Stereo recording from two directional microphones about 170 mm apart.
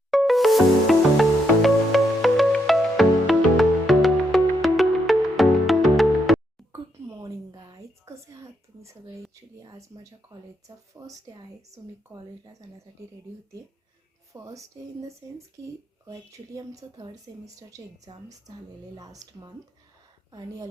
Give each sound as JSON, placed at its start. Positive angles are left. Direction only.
{"t": 0.1, "sound": "music", "side_deg": 0}
{"t": 7.2, "sound": "a sound", "side_deg": -20}
{"t": 9.3, "sound": "a woman's voice", "side_deg": -20}
{"t": 14.3, "sound": "a woman's voice", "side_deg": -20}